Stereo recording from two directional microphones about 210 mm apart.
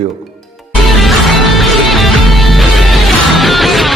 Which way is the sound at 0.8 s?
Centre (ahead or behind).